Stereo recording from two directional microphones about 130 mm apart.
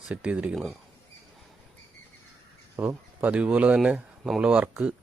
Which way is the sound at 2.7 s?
15° right (ahead or behind).